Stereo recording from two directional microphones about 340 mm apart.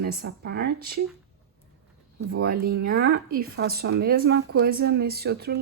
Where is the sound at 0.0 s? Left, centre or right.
Right.